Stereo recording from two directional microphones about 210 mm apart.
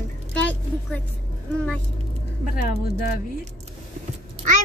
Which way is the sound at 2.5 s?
45° left (ahead or behind).